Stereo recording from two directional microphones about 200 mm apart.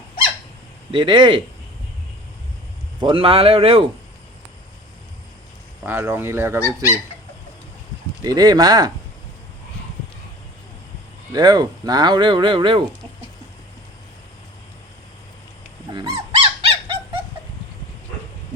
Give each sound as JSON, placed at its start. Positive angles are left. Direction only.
{"t": 0.9, "sound": "speech", "side_deg": -25}
{"t": 3.0, "sound": "speech", "side_deg": -25}
{"t": 5.8, "sound": "speech", "side_deg": -10}
{"t": 8.2, "sound": "speech", "side_deg": -20}
{"t": 11.3, "sound": "speech", "side_deg": -20}
{"t": 15.9, "sound": "dog", "side_deg": -20}
{"t": 16.3, "sound": "bird", "side_deg": -25}